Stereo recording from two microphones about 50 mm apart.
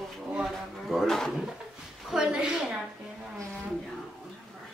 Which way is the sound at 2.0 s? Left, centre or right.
Centre.